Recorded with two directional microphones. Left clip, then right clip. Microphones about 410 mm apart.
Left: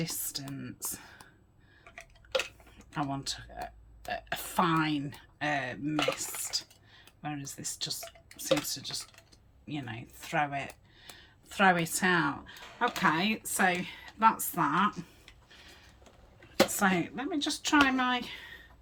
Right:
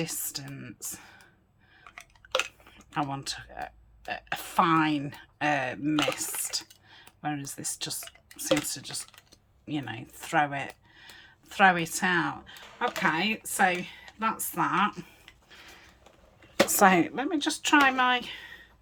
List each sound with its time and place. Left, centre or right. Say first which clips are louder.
0.0 s speech: right 3 dB; centre
2.4 s speech: right 5 dB; centre
15.4 s a sound: right 4 dB; centre
16.6 s speech: right 6 dB; centre